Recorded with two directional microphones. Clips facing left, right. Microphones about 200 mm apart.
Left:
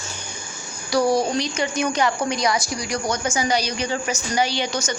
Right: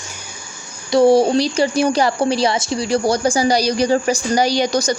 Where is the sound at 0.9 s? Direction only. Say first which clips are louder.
Right 7 dB; 25° right (ahead or behind).